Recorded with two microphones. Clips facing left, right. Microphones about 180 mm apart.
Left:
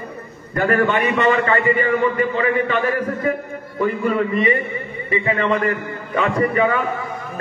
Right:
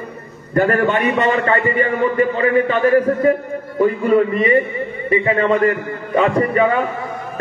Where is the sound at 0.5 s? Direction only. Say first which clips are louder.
Right 2 dB; 40° right (ahead or behind).